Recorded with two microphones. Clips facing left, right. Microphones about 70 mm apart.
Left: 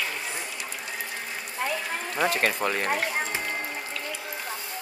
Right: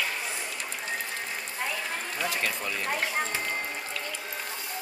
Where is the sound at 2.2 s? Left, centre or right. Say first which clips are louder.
Left 8 dB; left.